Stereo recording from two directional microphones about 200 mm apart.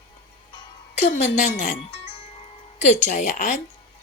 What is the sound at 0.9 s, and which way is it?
Speech, 35° left (ahead or behind).